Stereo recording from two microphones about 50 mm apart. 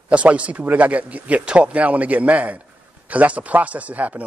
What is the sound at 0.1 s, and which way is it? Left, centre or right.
Speech, right.